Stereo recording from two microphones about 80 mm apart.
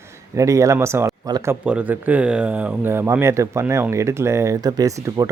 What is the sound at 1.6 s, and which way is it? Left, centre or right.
Speech, centre.